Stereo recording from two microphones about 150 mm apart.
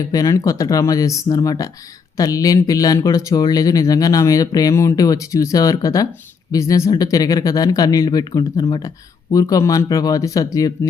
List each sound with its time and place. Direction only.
0.1 s speech: 25° left (ahead or behind)